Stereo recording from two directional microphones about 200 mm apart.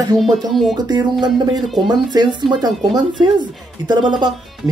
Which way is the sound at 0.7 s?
20° right (ahead or behind).